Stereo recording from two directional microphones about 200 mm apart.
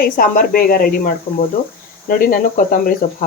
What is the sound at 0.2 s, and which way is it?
Speech, 45° left (ahead or behind).